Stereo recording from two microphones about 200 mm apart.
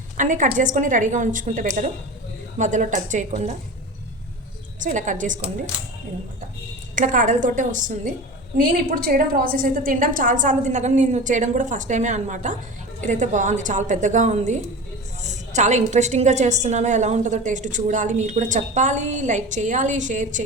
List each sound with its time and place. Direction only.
0.2 s a woman's voice: 40° right (ahead or behind)
4.8 s a woman's voice: 40° right (ahead or behind)
6.9 s a woman's voice: 40° right (ahead or behind)